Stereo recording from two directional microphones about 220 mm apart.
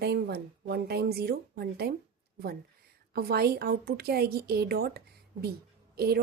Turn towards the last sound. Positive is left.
turn(degrees=-45)  # may be behind; listen again after turning